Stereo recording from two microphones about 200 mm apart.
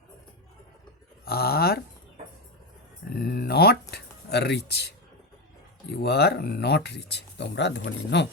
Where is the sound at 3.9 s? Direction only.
55° left (ahead or behind).